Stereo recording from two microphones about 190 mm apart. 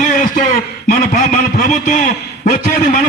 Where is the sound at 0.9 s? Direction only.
40° left (ahead or behind).